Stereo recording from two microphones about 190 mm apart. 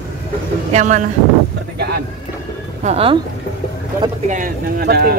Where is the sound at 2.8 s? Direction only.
30° right (ahead or behind).